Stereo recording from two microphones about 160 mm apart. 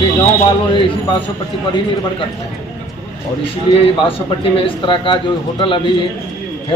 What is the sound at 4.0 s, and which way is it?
Speech, 35° left (ahead or behind).